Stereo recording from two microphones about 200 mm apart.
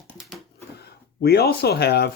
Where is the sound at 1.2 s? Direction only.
50° left (ahead or behind).